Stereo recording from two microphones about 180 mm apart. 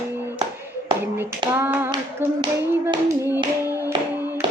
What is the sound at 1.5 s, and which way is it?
Clapping, 10° right (ahead or behind).